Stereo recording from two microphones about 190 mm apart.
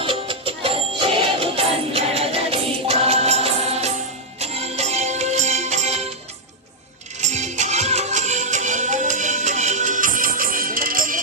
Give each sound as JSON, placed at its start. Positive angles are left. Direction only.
{"t": 0.0, "sound": "music", "side_deg": -30}
{"t": 7.2, "sound": "music", "side_deg": -40}